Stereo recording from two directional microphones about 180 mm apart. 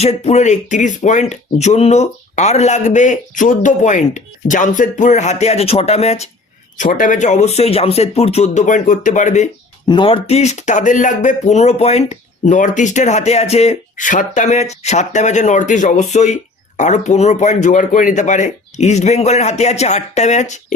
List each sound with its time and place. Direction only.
0.0 s speech: 35° left (ahead or behind)
9.8 s speech: 25° left (ahead or behind); by 20.7 s 40° left (ahead or behind)